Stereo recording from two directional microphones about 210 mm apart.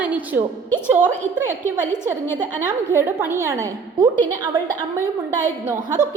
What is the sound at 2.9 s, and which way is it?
A woman's voice, 10° right (ahead or behind).